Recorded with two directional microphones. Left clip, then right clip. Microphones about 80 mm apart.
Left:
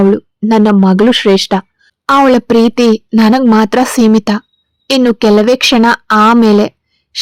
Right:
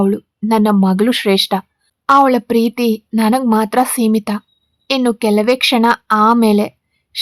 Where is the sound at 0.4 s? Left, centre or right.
Left.